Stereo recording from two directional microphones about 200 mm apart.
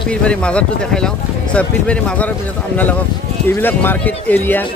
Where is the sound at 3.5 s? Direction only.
10° left (ahead or behind).